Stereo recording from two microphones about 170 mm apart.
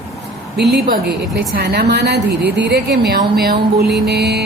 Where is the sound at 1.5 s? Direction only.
70° right (ahead or behind).